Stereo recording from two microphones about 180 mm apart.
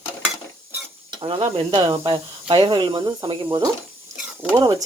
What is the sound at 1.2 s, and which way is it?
Speech, 30° right (ahead or behind).